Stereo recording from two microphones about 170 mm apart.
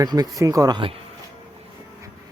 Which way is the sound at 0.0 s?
20° right (ahead or behind).